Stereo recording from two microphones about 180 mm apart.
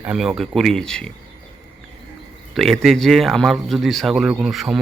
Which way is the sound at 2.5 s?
Centre (ahead or behind).